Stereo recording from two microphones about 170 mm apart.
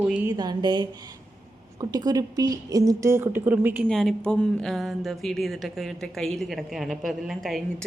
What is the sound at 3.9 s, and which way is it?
Speech, 5° left (ahead or behind).